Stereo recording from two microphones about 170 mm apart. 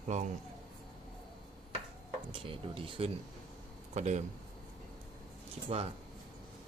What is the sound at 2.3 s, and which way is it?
Speech, 30° right (ahead or behind).